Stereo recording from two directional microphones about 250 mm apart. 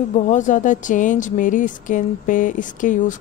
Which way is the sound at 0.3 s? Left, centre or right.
Left.